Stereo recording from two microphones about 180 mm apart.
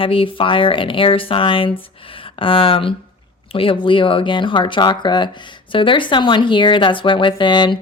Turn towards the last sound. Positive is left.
turn(degrees=25)  # may be behind; listen again after turning